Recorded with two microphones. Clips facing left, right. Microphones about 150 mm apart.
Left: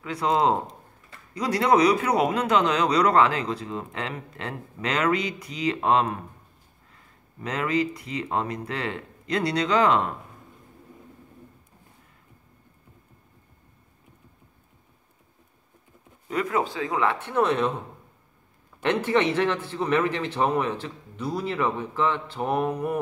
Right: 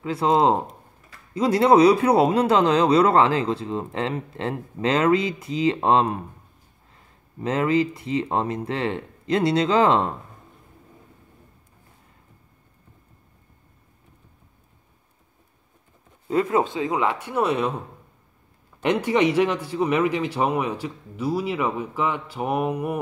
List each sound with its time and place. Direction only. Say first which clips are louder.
0.0 s speech: right 4 dB; 25° right (ahead or behind)
16.3 s speech: right 5 dB; 25° right (ahead or behind); by 17.7 s 10° right (ahead or behind)
18.8 s a man's voice: right 2 dB; 15° right (ahead or behind)